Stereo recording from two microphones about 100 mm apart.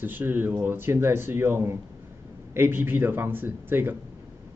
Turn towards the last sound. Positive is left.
turn(degrees=-20)  # may be behind; listen again after turning